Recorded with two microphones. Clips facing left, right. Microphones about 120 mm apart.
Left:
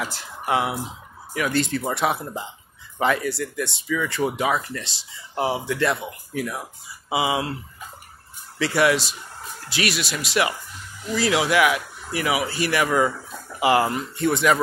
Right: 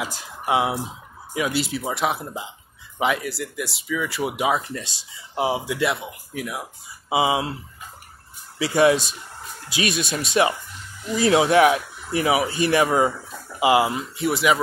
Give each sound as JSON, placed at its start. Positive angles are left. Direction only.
{"t": 0.0, "sound": "speech", "side_deg": -15}
{"t": 1.5, "sound": "speech", "side_deg": -5}
{"t": 7.1, "sound": "speech", "side_deg": -25}
{"t": 8.5, "sound": "speech", "side_deg": -15}
{"t": 13.6, "sound": "speech", "side_deg": -15}
{"t": 14.1, "sound": "speech", "side_deg": -5}